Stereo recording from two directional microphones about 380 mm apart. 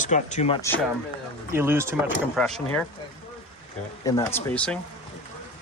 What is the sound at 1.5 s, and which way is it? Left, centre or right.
Speech, centre.